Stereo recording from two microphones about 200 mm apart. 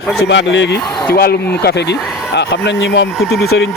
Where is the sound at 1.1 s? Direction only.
50° left (ahead or behind).